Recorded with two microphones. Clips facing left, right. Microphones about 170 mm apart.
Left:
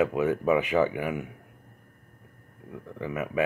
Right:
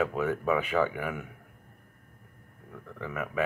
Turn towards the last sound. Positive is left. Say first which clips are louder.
# left 4 dB
turn(degrees=10)  # may be behind; listen again after turning